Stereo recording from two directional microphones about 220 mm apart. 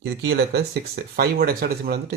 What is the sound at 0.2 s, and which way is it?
Speech, 50° right (ahead or behind).